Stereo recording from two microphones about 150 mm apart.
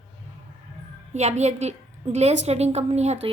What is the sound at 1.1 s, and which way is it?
A woman's voice, 50° right (ahead or behind).